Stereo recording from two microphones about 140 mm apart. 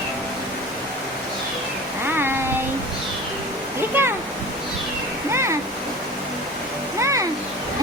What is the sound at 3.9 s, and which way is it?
Waterfall, 15° right (ahead or behind).